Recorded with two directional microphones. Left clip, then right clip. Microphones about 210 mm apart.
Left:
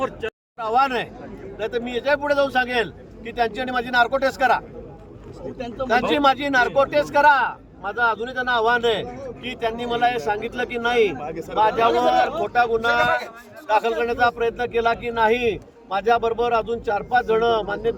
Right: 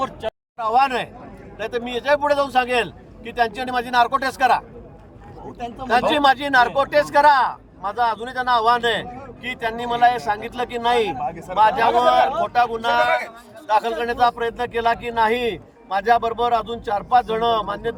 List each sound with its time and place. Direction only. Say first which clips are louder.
0.0 s speech: right 1 dB; 40° right (ahead or behind)
0.6 s speech: right 2 dB; 5° right (ahead or behind)
5.9 s speech: right 2 dB; 10° right (ahead or behind)
11.2 s speech: right 4 dB; 25° left (ahead or behind)
11.9 s a man's voice: right 3 dB; 5° right (ahead or behind)